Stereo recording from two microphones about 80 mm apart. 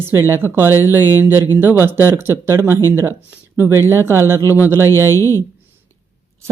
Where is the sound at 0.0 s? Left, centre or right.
Right.